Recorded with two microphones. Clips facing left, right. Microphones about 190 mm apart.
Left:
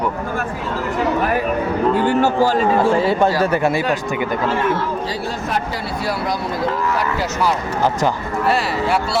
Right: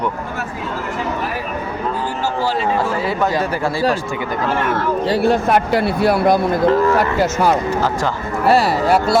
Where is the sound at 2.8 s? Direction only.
30° left (ahead or behind).